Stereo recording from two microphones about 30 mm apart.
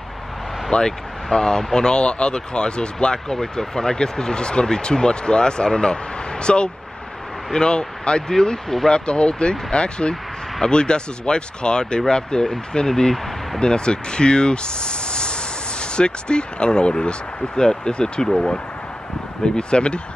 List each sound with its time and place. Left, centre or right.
0.7 s speech: left
3.3 s speech: centre
8.3 s speech: centre
8.8 s speech: left; by 13.2 s centre
13.6 s speech: left
19.4 s speech: left